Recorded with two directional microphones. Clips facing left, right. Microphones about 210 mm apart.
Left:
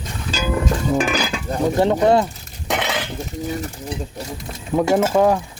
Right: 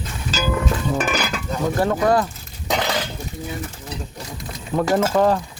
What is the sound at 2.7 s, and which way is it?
Dishes, 5° left (ahead or behind).